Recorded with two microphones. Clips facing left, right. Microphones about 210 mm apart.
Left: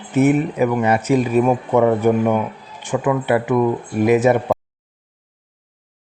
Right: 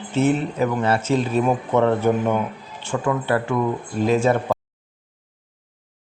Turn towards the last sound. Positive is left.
turn(degrees=15)  # may be behind; listen again after turning